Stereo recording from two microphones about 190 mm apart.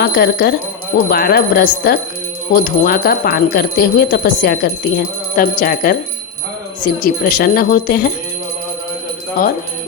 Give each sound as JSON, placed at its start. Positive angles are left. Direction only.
{"t": 0.0, "sound": "speech", "side_deg": 55}